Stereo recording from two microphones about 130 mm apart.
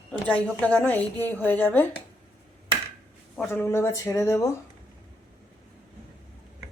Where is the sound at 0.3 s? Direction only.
10° left (ahead or behind).